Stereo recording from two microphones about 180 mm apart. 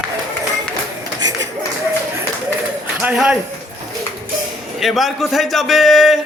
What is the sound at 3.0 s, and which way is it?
Speech, 5° right (ahead or behind).